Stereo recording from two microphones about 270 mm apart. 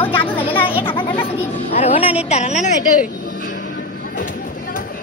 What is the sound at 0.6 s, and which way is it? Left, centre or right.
A woman's voice, centre.